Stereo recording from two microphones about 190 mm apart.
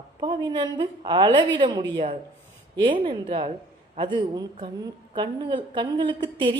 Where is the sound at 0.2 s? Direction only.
25° right (ahead or behind).